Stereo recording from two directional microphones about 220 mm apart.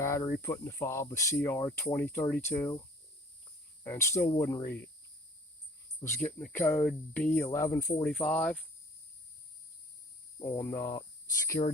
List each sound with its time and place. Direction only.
0.0 s speech: 15° left (ahead or behind)
3.8 s speech: 10° left (ahead or behind)
6.0 s speech: 10° left (ahead or behind)
10.3 s speech: 15° left (ahead or behind)
11.6 s speech: 30° left (ahead or behind)